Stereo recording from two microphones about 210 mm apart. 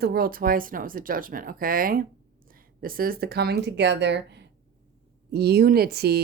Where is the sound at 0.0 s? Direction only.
45° right (ahead or behind).